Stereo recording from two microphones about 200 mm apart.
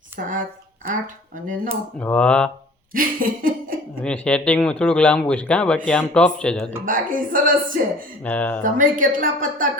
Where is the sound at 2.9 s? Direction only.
45° right (ahead or behind).